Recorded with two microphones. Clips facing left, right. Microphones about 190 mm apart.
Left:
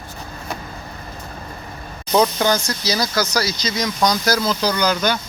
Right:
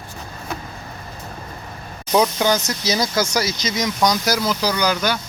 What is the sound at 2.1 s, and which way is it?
Speech, 10° right (ahead or behind).